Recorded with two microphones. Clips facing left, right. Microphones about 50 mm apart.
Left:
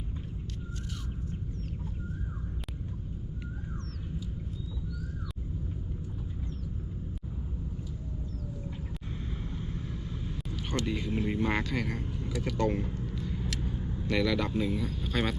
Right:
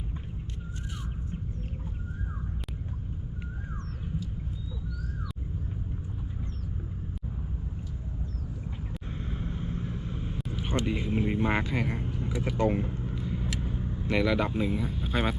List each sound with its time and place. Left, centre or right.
9.1 s vehicle: right